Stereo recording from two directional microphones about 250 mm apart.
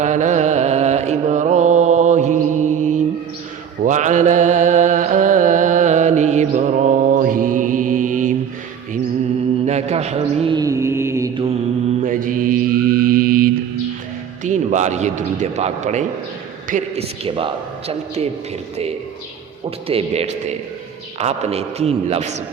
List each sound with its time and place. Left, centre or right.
0.0 s music: right
3.8 s mantra: right
9.6 s mantra: right
12.0 s mantra: right
14.4 s a man's voice: right
19.9 s a man's voice: right